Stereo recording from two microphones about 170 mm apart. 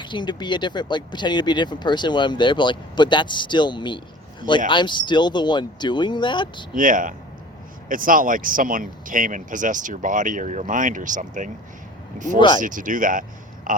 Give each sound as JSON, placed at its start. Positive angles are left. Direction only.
{"t": 0.0, "sound": "speech", "side_deg": 25}
{"t": 6.7, "sound": "speech", "side_deg": -50}
{"t": 12.5, "sound": "speech", "side_deg": -50}
{"t": 13.7, "sound": "a sound", "side_deg": -55}